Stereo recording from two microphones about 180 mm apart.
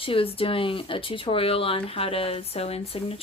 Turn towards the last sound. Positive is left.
turn(degrees=35)  # may be behind; listen again after turning